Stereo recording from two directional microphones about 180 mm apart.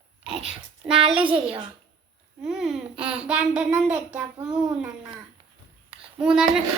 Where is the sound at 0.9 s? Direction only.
5° right (ahead or behind).